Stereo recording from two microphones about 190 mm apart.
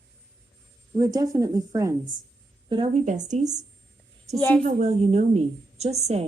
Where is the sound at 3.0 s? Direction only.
40° right (ahead or behind).